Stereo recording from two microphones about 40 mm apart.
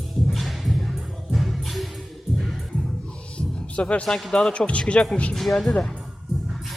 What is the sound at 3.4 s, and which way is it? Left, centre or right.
Music, left.